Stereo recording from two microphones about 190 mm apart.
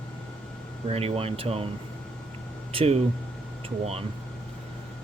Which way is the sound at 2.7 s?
30° right (ahead or behind).